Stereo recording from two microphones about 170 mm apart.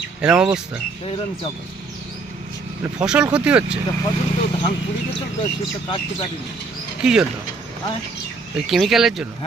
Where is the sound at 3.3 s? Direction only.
5° right (ahead or behind).